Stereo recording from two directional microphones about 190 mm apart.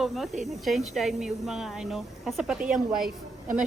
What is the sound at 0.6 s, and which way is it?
Speech, centre (ahead or behind).